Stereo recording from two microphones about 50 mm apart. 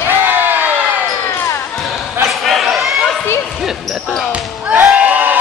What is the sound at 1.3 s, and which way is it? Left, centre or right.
Basketball bounce, left.